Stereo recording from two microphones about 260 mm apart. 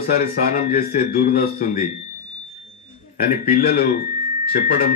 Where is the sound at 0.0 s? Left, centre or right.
Left.